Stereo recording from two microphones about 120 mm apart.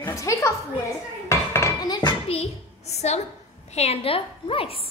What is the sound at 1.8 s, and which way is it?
Dishes, 35° left (ahead or behind).